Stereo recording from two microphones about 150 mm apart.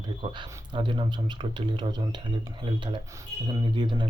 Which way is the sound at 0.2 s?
35° right (ahead or behind).